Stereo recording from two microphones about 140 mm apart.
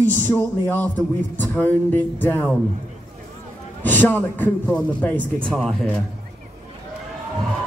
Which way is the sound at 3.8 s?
15° left (ahead or behind).